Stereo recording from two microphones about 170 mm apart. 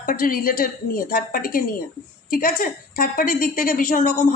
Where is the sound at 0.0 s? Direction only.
55° left (ahead or behind).